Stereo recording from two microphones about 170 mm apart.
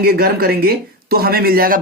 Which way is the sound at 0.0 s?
65° right (ahead or behind).